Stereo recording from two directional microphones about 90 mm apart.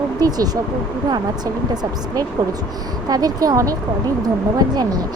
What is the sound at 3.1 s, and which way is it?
Speech, 45° right (ahead or behind).